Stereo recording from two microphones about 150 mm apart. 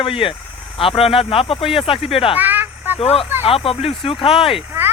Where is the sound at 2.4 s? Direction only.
10° right (ahead or behind).